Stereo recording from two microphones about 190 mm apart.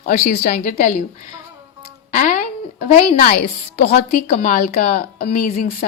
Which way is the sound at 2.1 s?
45° left (ahead or behind).